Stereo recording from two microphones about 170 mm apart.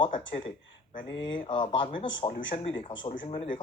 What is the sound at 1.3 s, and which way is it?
Speech, 30° left (ahead or behind).